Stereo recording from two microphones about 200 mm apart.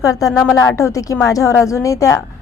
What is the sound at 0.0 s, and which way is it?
A woman's voice, 15° left (ahead or behind).